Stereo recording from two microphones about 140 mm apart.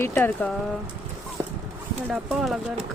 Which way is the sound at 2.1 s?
5° right (ahead or behind).